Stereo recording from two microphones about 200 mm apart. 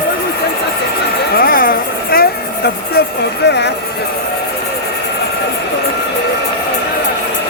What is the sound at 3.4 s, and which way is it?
Speech, 60° left (ahead or behind).